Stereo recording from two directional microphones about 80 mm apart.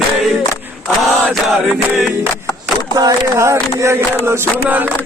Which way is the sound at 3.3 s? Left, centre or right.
Right.